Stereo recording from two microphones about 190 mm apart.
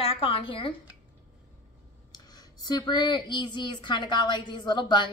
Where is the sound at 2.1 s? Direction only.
20° left (ahead or behind).